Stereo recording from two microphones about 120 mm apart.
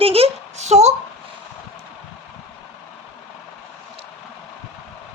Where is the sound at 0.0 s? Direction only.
55° right (ahead or behind).